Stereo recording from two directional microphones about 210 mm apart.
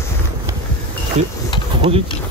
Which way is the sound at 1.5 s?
20° left (ahead or behind).